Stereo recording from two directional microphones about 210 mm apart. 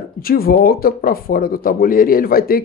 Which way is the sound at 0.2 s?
45° left (ahead or behind).